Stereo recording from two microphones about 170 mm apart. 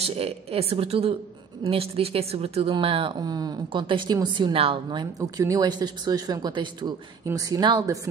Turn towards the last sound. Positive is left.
turn(degrees=-25)  # may be behind; listen again after turning